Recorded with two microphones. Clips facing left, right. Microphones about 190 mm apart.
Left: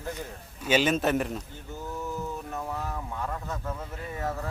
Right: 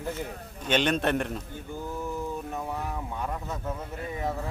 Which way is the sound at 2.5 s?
10° right (ahead or behind).